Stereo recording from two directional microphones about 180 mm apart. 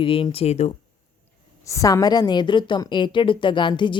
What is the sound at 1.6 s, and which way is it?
A woman's voice, 15° left (ahead or behind).